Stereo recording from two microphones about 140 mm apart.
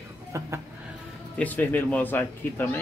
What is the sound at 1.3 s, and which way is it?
Speech, 10° left (ahead or behind).